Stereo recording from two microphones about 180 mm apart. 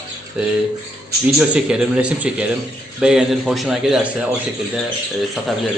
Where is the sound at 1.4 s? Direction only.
5° right (ahead or behind).